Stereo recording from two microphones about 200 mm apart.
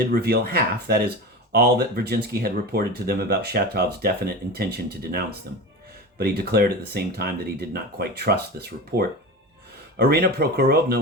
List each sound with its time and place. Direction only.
0.1 s speech: 50° right (ahead or behind)